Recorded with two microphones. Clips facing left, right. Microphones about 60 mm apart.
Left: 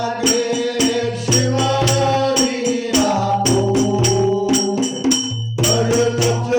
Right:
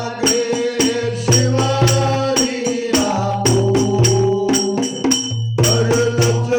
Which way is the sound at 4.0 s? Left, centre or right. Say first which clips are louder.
Right 1 dB; right.